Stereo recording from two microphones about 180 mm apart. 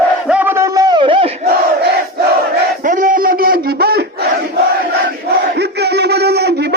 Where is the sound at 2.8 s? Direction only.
45° right (ahead or behind).